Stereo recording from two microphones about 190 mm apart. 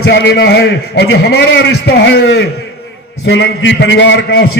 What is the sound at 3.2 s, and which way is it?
A man's voice, 80° left.